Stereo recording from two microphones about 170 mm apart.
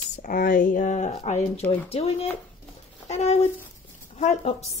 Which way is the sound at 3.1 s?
40° left (ahead or behind).